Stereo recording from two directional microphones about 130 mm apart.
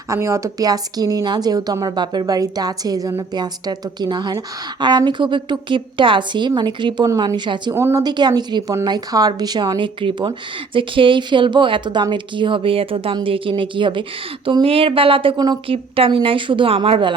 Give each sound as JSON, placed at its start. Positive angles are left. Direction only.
{"t": 0.1, "sound": "a woman's voice", "side_deg": -20}
{"t": 7.7, "sound": "a woman's voice", "side_deg": -20}
{"t": 8.0, "sound": "a woman's voice", "side_deg": -35}